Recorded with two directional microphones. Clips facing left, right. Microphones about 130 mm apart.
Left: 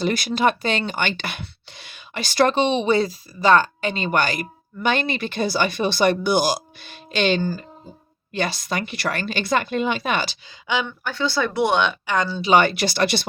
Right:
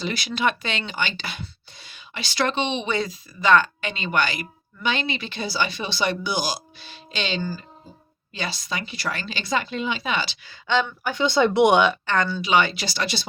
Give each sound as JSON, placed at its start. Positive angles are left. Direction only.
{"t": 0.0, "sound": "speech", "side_deg": 50}
{"t": 10.4, "sound": "speech", "side_deg": 15}
{"t": 10.8, "sound": "speech", "side_deg": -10}
{"t": 12.0, "sound": "speech", "side_deg": 15}
{"t": 12.5, "sound": "speech", "side_deg": 50}